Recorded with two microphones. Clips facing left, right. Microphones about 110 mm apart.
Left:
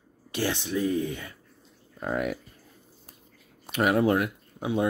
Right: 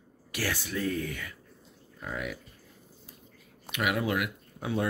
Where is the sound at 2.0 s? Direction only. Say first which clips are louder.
Left 8 dB; 50° left (ahead or behind).